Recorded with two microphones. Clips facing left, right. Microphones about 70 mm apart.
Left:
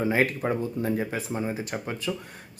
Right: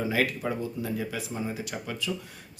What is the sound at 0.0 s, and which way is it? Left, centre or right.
Speech, left.